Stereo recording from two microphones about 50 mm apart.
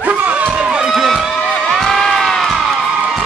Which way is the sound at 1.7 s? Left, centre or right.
Centre.